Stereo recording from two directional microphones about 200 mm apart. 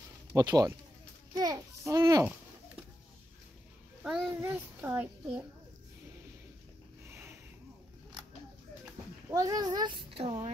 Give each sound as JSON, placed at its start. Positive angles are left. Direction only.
{"t": 0.4, "sound": "a child's voice", "side_deg": -20}
{"t": 1.3, "sound": "a sound", "side_deg": -15}
{"t": 4.0, "sound": "a child's voice", "side_deg": -5}
{"t": 9.3, "sound": "a child's voice", "side_deg": -20}